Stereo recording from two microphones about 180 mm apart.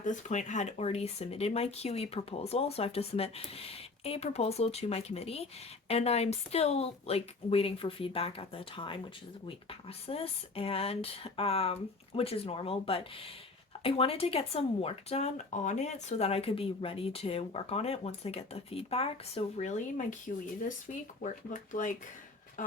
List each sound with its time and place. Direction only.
0.0 s speech: 45° left (ahead or behind)
21.2 s speech: 45° left (ahead or behind)